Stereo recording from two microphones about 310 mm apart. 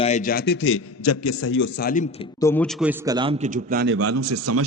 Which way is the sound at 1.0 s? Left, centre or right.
Left.